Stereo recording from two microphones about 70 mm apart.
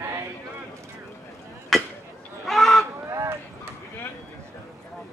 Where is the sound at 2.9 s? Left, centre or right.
Right.